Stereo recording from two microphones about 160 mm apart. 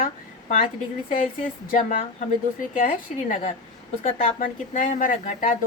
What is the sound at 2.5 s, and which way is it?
A woman's voice, 55° left (ahead or behind).